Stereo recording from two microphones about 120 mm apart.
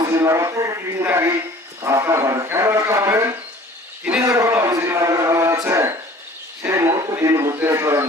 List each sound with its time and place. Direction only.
0.1 s speech: 25° right (ahead or behind)
4.3 s music: 25° right (ahead or behind)
6.6 s a sound: 25° right (ahead or behind)